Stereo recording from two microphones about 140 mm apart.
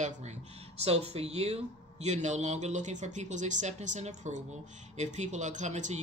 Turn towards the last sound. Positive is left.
turn(degrees=-55)  # may be behind; listen again after turning